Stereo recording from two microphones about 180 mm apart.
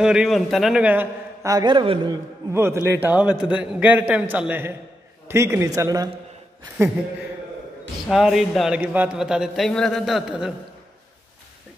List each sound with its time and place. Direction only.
0.0 s a man's voice: 5° right (ahead or behind); by 2.1 s 25° right (ahead or behind)
2.5 s a man's voice: 15° right (ahead or behind)
8.1 s a man's voice: centre (ahead or behind)